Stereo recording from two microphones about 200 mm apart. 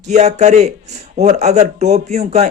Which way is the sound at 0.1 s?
35° right (ahead or behind).